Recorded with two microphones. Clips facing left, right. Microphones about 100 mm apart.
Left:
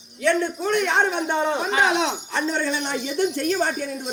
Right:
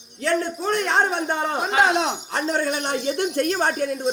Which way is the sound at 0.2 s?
35° right (ahead or behind).